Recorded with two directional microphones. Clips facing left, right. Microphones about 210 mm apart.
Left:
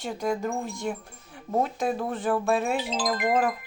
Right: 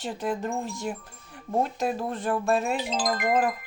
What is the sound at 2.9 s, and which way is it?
Speech, 45° right (ahead or behind).